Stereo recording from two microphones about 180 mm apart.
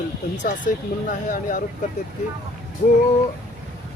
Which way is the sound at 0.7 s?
50° left (ahead or behind).